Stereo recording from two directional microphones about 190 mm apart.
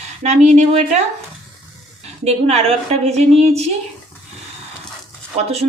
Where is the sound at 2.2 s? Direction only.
35° right (ahead or behind).